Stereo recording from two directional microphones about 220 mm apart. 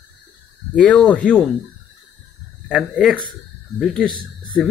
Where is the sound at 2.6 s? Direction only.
Centre (ahead or behind).